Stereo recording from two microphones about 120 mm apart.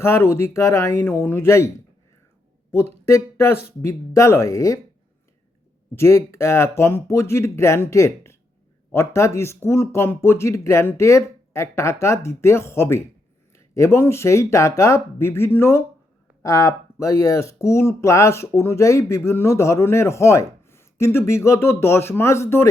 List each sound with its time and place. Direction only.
0.0 s speech: 20° left (ahead or behind)
3.1 s speech: 25° left (ahead or behind)
6.0 s speech: 25° left (ahead or behind)